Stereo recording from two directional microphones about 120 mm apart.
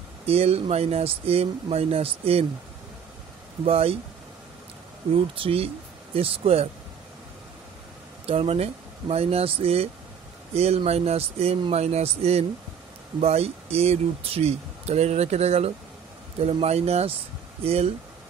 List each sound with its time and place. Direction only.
0.3 s speech: 55° right (ahead or behind)
3.6 s speech: 55° right (ahead or behind)
5.1 s speech: 50° right (ahead or behind)
8.3 s speech: 55° right (ahead or behind)